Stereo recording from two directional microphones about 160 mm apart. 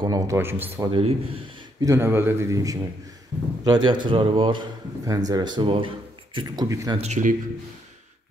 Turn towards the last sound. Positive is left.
turn(degrees=-50)  # may be behind; listen again after turning